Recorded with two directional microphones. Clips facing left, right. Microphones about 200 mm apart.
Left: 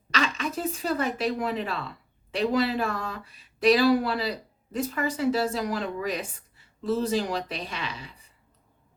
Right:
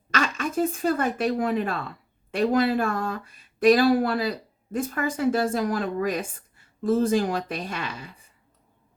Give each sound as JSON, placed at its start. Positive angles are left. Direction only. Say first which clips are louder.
{"t": 0.1, "sound": "speech", "louder": "right 2 dB", "side_deg": -50}